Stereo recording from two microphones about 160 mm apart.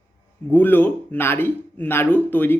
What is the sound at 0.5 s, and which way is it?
A man's voice, 10° left (ahead or behind).